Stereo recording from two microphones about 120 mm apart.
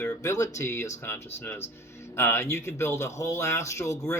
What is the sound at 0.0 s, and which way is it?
Speech, 25° left (ahead or behind).